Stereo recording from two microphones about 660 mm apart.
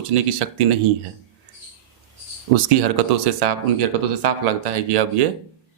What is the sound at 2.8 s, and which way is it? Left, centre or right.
Speech, right.